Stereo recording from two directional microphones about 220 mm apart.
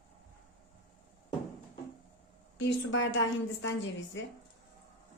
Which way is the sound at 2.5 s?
60° left (ahead or behind).